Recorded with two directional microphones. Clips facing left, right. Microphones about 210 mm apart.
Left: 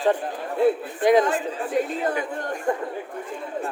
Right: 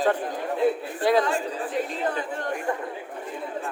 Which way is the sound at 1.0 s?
20° left (ahead or behind).